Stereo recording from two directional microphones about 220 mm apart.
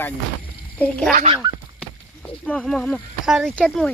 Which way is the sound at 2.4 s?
5° left (ahead or behind).